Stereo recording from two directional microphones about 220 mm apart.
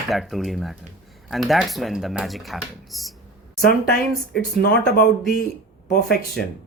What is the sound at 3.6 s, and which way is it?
Speech, 45° left (ahead or behind).